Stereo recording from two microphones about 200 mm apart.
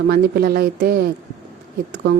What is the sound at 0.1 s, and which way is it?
Speech, 50° right (ahead or behind).